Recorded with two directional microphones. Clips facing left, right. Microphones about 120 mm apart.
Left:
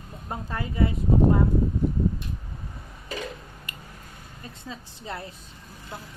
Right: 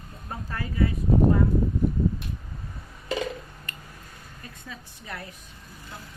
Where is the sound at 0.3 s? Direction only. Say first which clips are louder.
Left 2 dB; 20° left (ahead or behind).